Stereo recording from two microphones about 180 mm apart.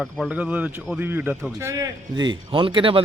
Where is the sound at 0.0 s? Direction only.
5° right (ahead or behind).